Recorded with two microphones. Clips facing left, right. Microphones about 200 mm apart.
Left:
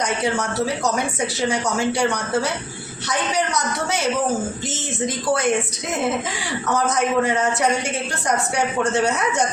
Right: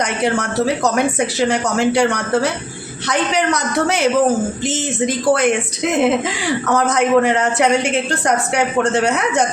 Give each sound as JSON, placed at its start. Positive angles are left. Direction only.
{"t": 0.0, "sound": "a man's voice", "side_deg": -65}
{"t": 6.7, "sound": "a man's voice", "side_deg": -65}